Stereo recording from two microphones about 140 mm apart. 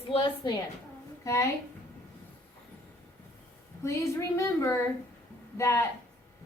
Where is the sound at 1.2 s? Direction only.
20° left (ahead or behind).